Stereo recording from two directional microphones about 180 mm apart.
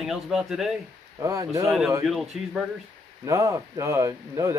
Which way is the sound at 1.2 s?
15° right (ahead or behind).